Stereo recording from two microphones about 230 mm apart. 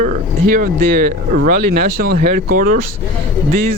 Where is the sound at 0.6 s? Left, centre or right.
Right.